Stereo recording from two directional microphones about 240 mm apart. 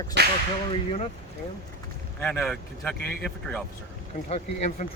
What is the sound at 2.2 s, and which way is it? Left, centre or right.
Speech, centre.